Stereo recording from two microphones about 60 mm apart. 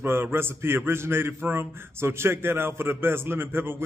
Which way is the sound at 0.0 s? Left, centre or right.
Right.